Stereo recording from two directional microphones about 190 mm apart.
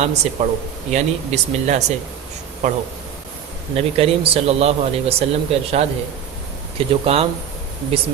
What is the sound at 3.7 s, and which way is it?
A man's voice, 30° right (ahead or behind).